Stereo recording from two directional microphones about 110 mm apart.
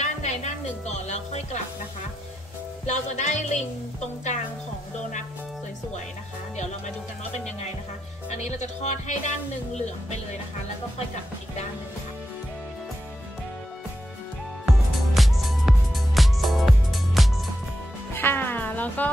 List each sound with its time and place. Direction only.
0.0 s music: 90° left
2.9 s speech: 90° left
8.3 s speech: 90° left
14.7 s music: centre (ahead or behind)
18.1 s music: 20° left (ahead or behind)